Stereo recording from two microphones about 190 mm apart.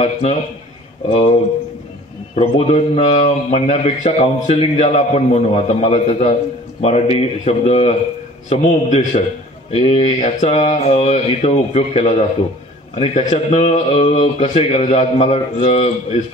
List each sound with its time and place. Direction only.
0.0 s a man's voice: 35° left (ahead or behind)